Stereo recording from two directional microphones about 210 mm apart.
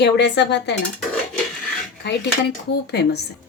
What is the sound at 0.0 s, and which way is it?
Speech, 55° left (ahead or behind).